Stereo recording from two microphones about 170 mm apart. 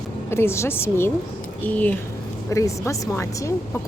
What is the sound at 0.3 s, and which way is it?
A woman's voice, 15° left (ahead or behind).